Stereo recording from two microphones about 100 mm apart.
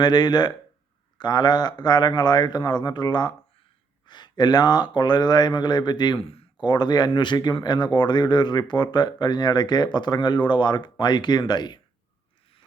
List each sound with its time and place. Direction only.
0.0 s speech: 45° left (ahead or behind)
6.1 s speech: 70° left (ahead or behind)
6.6 s speech: 45° left (ahead or behind)